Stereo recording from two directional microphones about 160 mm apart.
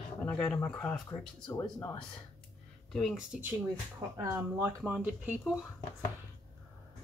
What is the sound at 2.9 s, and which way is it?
Speech, centre (ahead or behind).